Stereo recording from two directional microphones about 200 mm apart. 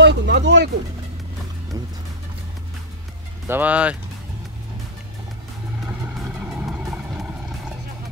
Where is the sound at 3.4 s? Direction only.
10° right (ahead or behind).